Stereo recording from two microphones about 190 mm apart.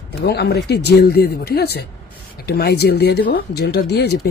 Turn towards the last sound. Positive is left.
turn(degrees=60)  # may be behind; listen again after turning